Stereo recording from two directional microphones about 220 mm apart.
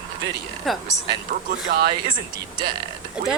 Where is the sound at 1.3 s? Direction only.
40° right (ahead or behind).